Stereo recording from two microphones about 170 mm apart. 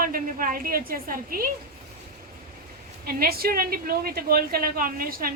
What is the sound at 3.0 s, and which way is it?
A woman's voice, 60° right (ahead or behind).